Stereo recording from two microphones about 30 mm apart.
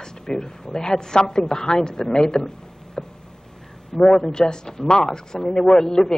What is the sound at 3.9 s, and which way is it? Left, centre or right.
A woman's voice, left.